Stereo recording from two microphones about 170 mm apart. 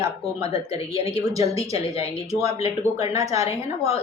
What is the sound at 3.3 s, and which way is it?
Speech, 20° right (ahead or behind).